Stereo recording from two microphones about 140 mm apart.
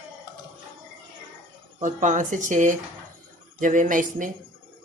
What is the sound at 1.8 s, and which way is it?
Speech, 60° right (ahead or behind).